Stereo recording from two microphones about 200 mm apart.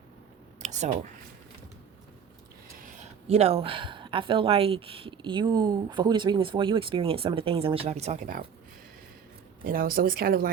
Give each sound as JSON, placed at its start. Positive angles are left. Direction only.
{"t": 0.6, "sound": "a sound", "side_deg": -35}
{"t": 3.2, "sound": "speech", "side_deg": -30}
{"t": 9.6, "sound": "speech", "side_deg": -45}